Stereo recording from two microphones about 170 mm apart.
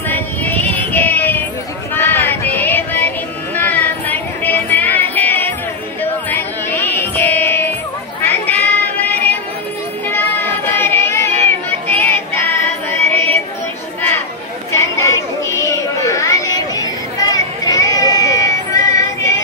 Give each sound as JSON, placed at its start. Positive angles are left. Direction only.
{"t": 0.1, "sound": "child singing", "side_deg": 10}
{"t": 3.5, "sound": "a sound", "side_deg": 10}
{"t": 9.1, "sound": "music", "side_deg": 10}
{"t": 10.0, "sound": "child singing", "side_deg": 15}
{"t": 11.9, "sound": "music", "side_deg": 10}
{"t": 14.7, "sound": "a sound", "side_deg": 15}